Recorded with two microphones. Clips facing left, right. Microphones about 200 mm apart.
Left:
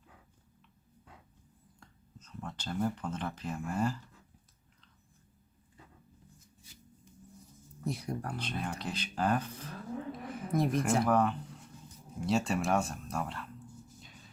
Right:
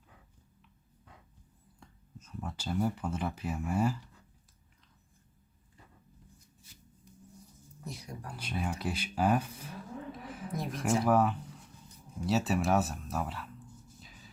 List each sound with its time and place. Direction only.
1.8 s speech: 10° right (ahead or behind)
7.9 s speech: 60° left (ahead or behind)
8.4 s speech: 10° right (ahead or behind)
14.0 s a sound: centre (ahead or behind)